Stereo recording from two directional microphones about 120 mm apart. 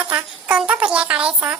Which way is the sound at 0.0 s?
10° right (ahead or behind).